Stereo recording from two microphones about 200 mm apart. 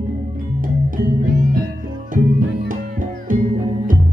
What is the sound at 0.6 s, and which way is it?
Music, 45° right (ahead or behind).